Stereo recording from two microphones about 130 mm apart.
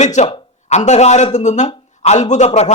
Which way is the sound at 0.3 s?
45° left (ahead or behind).